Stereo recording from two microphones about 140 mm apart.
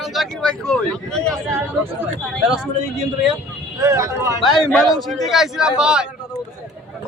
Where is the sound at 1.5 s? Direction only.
15° right (ahead or behind).